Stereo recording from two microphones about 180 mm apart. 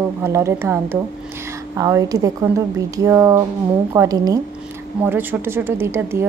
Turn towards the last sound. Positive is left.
turn(degrees=-15)  # may be behind; listen again after turning